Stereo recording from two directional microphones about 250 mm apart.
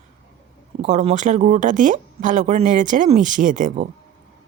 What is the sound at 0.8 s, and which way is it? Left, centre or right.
Speech, right.